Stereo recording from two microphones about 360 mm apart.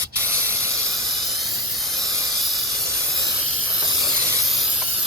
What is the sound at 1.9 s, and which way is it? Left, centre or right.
Hiss, centre.